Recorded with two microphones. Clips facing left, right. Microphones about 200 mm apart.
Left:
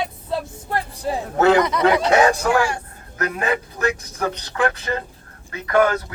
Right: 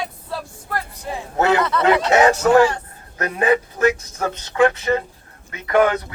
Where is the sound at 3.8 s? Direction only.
25° right (ahead or behind).